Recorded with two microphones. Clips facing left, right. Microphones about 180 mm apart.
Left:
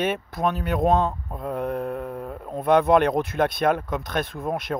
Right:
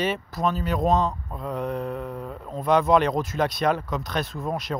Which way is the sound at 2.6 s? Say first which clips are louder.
Left 2 dB; 55° left (ahead or behind).